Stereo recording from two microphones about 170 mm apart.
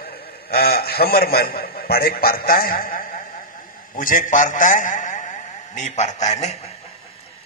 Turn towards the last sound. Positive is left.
turn(degrees=40)  # may be behind; listen again after turning